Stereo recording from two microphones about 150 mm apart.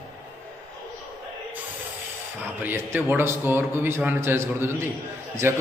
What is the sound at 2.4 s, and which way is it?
A man's voice, 10° right (ahead or behind).